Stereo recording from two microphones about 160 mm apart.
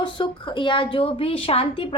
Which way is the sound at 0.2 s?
30° left (ahead or behind).